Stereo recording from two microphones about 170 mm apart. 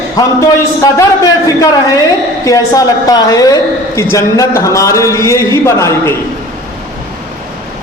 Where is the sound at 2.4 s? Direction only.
20° left (ahead or behind).